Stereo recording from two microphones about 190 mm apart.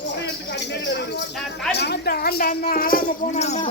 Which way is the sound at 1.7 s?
60° left (ahead or behind).